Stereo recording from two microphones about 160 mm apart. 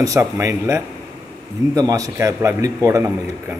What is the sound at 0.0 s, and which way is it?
A man's voice, 20° right (ahead or behind).